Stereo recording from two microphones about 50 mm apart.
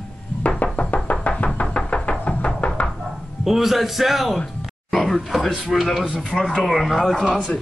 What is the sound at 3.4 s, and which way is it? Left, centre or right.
A man's voice, centre.